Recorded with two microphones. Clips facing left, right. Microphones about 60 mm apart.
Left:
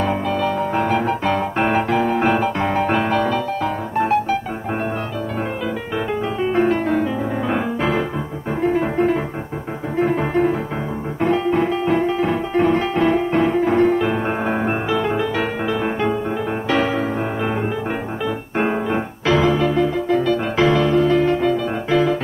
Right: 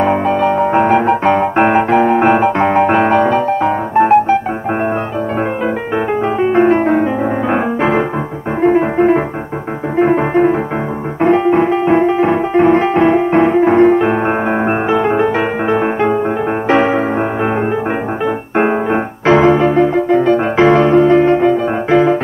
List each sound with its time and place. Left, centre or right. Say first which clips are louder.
0.0 s piano: right 7 dB; right
6.4 s music: right 7 dB; right
8.6 s piano: right 7 dB; right
9.9 s music: right 7 dB; right
18.6 s keyboard: right 6 dB; right